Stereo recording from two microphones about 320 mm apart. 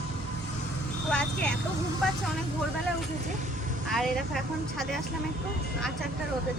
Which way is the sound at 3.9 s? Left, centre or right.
Centre.